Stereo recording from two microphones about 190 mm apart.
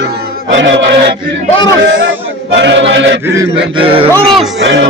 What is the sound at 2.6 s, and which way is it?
Yodeling, 70° right (ahead or behind).